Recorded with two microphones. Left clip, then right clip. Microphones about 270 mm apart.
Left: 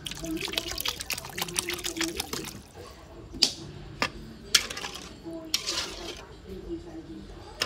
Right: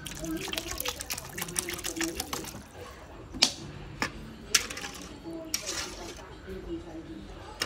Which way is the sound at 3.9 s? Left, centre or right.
Centre.